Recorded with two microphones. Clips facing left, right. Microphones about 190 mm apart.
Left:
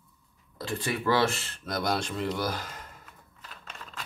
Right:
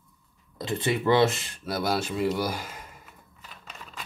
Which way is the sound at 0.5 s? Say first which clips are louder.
Right 4 dB; 20° right (ahead or behind).